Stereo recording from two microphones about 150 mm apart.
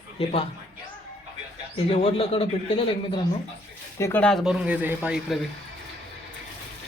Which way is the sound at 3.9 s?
20° left (ahead or behind).